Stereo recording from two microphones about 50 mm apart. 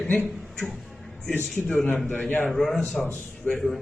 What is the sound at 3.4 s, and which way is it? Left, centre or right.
Speech, centre.